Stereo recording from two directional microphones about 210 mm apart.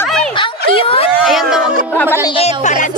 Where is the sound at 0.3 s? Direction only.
25° left (ahead or behind).